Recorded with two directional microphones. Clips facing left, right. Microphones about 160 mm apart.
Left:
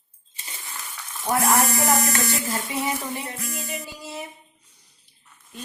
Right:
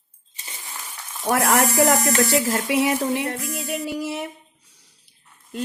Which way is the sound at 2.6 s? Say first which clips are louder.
Right 7 dB; 85° right.